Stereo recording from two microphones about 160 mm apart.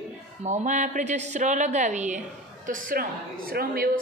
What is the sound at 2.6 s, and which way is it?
A woman's voice, 60° right (ahead or behind).